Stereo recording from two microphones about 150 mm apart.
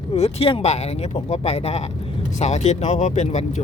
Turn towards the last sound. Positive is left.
turn(degrees=50)  # may be behind; listen again after turning